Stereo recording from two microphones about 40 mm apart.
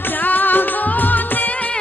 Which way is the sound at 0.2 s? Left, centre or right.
Left.